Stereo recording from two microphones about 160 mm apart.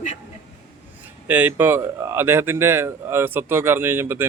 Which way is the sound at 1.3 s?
10° right (ahead or behind).